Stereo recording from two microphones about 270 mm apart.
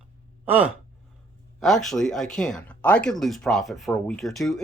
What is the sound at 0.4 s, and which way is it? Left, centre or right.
Speech, centre.